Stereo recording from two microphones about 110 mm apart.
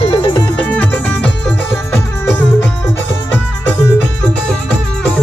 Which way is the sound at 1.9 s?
20° left (ahead or behind).